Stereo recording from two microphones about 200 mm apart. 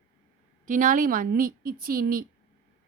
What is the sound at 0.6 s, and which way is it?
A woman's voice, 40° right (ahead or behind).